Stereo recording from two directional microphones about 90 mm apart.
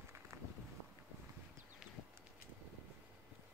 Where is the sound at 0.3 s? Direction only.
35° right (ahead or behind).